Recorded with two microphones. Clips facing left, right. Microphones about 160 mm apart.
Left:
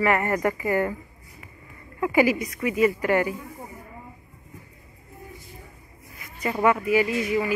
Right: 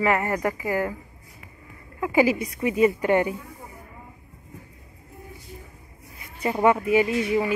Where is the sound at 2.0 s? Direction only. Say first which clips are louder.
Even; 15° right (ahead or behind).